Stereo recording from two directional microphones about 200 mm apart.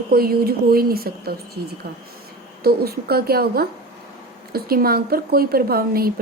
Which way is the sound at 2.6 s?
50° right (ahead or behind).